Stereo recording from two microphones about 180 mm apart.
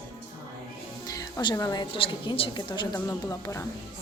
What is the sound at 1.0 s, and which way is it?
A woman's voice, 20° left (ahead or behind).